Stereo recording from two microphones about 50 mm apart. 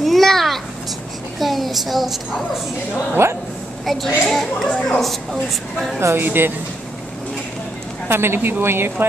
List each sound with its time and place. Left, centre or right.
0.0 s a sound: centre
1.4 s a woman's voice: centre
3.2 s speech: right
3.8 s speech: centre
6.1 s a woman's voice: right
8.1 s a woman's voice: right